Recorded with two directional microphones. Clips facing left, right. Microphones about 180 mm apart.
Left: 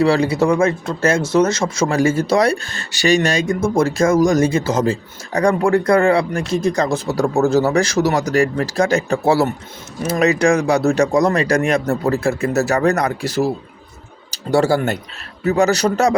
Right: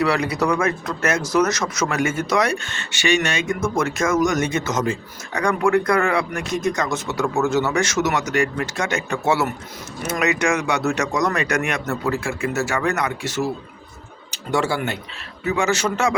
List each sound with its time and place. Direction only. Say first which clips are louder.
0.0 s speech: left 5 dB; 30° left (ahead or behind)